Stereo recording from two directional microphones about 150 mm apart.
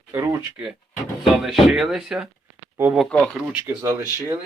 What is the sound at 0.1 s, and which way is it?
Speech, 15° right (ahead or behind).